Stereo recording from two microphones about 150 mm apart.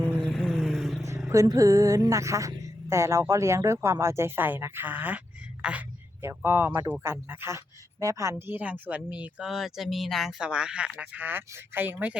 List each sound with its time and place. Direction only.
0.0 s vehicle: 5° left (ahead or behind)
1.3 s a woman's voice: 20° right (ahead or behind)